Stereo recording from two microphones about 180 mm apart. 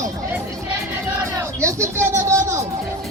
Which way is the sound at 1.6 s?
15° right (ahead or behind).